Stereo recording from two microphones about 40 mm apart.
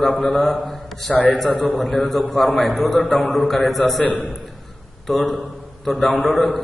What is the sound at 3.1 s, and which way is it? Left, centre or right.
Speech, centre.